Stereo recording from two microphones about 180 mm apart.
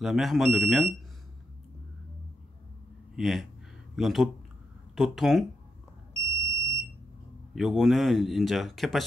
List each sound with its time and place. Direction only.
0.0 s speech: centre (ahead or behind)
3.2 s speech: centre (ahead or behind)
6.3 s smoke detector: 15° right (ahead or behind)
7.5 s speech: centre (ahead or behind)